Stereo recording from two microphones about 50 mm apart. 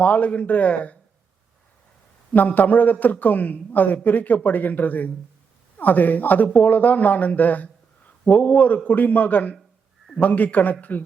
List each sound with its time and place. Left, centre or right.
0.0 s speech: left
2.5 s speech: left